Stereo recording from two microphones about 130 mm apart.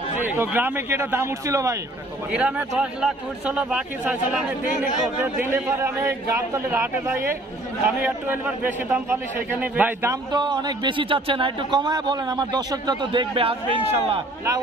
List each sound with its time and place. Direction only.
0.2 s a man's voice: 15° right (ahead or behind)
2.3 s a man's voice: 10° right (ahead or behind)
5.2 s a man's voice: 20° right (ahead or behind)
10.3 s a man's voice: 35° right (ahead or behind)